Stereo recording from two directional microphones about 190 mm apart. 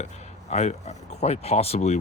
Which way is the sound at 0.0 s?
35° left (ahead or behind).